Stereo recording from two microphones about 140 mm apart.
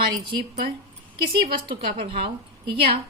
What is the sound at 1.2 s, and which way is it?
A woman's voice, 40° right (ahead or behind).